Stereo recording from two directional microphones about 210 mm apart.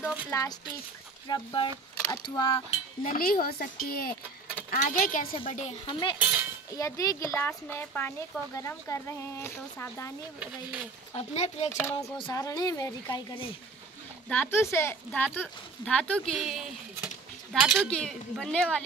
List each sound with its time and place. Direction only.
0.3 s a woman's voice: 15° left (ahead or behind)
3.0 s speech: 40° left (ahead or behind)
5.3 s a woman's voice: 30° left (ahead or behind)
6.1 s speech: 5° right (ahead or behind)
6.8 s speech: 15° left (ahead or behind)
10.4 s speech: 5° right (ahead or behind)
11.1 s speech: 30° left (ahead or behind)
11.7 s speech: 10° left (ahead or behind)
14.3 s speech: 10° left (ahead or behind)